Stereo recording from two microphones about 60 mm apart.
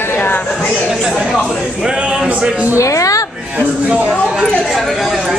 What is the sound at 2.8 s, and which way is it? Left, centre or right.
Speech, left.